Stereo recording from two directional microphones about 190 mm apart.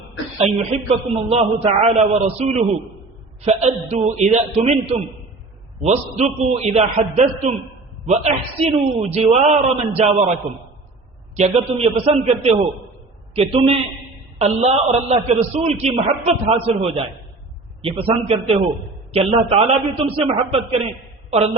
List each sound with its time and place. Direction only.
0.3 s a man's voice: 35° right (ahead or behind)
11.3 s a man's voice: 35° right (ahead or behind)